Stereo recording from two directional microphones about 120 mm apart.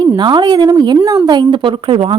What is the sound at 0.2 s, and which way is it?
A woman's voice, 40° right (ahead or behind).